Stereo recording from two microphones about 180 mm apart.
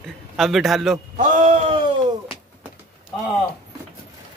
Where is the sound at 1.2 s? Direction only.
45° right (ahead or behind).